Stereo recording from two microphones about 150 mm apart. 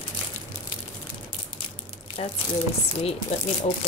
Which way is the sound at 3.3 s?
45° left (ahead or behind).